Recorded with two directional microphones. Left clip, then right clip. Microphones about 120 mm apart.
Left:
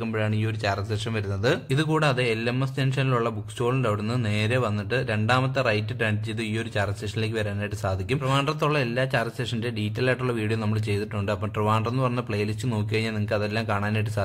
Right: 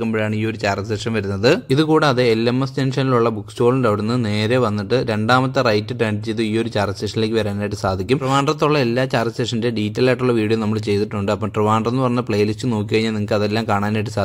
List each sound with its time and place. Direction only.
0.0 s speech: 30° right (ahead or behind)